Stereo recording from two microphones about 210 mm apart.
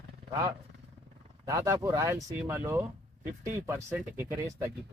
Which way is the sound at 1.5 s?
15° right (ahead or behind).